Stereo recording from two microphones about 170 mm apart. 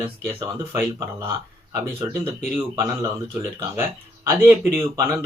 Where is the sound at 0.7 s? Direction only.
15° right (ahead or behind).